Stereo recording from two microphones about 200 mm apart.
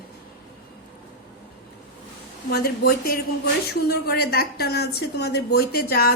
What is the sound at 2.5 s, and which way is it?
A woman's voice, 50° left (ahead or behind).